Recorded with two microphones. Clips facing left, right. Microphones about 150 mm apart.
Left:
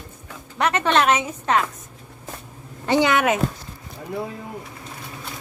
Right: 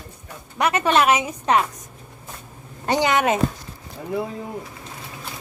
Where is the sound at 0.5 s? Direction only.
10° right (ahead or behind).